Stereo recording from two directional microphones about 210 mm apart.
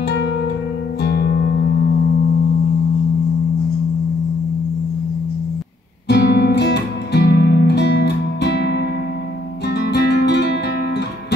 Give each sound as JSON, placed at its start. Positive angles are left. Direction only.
{"t": 1.0, "sound": "music", "side_deg": 45}
{"t": 6.0, "sound": "music", "side_deg": 50}
{"t": 9.8, "sound": "guitar", "side_deg": 50}